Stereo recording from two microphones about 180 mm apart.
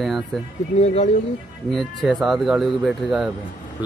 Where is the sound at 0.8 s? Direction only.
40° left (ahead or behind).